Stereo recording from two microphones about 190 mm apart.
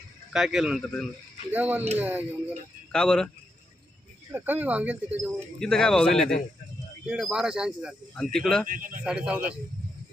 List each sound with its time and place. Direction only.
0.3 s speech: centre (ahead or behind)
2.9 s speech: 5° left (ahead or behind)
4.3 s speech: 10° right (ahead or behind)
5.5 s speech: 5° left (ahead or behind)
8.6 s speech: 45° right (ahead or behind)
9.0 s speech: 5° right (ahead or behind)